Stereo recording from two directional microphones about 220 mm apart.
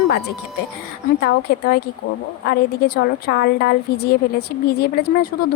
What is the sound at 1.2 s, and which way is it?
A woman's voice, 45° left (ahead or behind).